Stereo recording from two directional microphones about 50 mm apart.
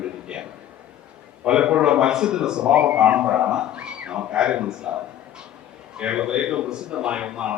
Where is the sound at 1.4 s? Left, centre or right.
Centre.